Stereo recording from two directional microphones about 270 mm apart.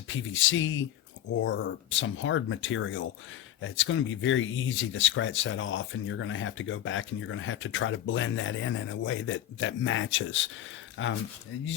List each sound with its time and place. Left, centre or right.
0.1 s speech: left